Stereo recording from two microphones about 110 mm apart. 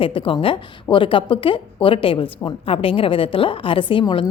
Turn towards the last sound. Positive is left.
turn(degrees=45)  # may be behind; listen again after turning